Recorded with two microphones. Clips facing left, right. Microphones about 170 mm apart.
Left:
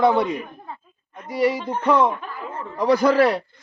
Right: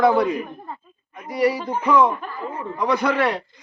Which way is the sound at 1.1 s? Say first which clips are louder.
Even; 10° right (ahead or behind).